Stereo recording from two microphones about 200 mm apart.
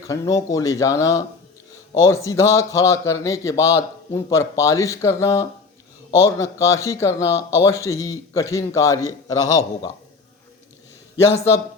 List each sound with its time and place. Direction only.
0.1 s speech: 15° left (ahead or behind)